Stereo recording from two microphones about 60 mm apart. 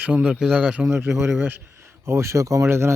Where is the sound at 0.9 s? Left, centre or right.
Right.